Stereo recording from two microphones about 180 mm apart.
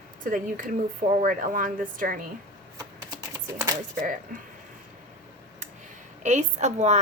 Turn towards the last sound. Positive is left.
turn(degrees=-40)  # may be behind; listen again after turning